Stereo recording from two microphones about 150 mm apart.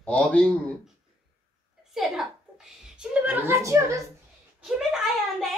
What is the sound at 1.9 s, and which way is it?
A child's voice, centre (ahead or behind).